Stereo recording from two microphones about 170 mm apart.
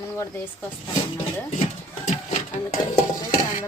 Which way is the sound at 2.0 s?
45° left (ahead or behind).